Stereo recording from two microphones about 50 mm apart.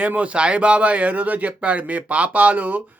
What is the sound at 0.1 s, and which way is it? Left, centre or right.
Speech, right.